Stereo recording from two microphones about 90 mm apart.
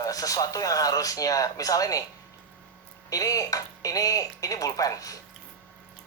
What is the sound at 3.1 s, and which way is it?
Speech, 40° left (ahead or behind).